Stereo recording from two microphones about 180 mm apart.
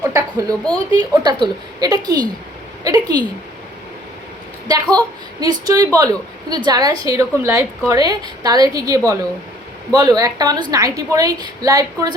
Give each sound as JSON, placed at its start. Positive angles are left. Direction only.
{"t": 0.1, "sound": "a sound", "side_deg": -20}
{"t": 1.1, "sound": "a woman's voice", "side_deg": -25}
{"t": 4.7, "sound": "a woman's voice", "side_deg": -20}